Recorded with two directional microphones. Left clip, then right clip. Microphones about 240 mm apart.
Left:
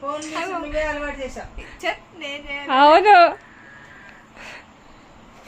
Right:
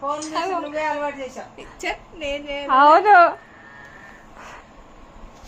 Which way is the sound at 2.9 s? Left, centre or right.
Left.